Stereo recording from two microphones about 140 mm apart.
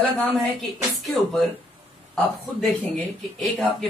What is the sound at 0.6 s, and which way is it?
Speech, centre (ahead or behind).